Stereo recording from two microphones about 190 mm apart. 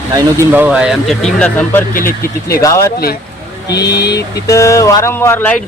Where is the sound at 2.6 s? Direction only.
15° left (ahead or behind).